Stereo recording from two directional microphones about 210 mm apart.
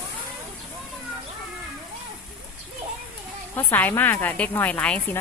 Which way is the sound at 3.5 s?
10° left (ahead or behind).